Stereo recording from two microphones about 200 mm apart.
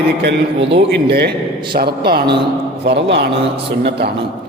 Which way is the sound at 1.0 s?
55° right (ahead or behind).